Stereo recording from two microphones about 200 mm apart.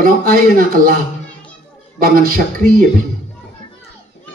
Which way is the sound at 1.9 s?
45° right (ahead or behind).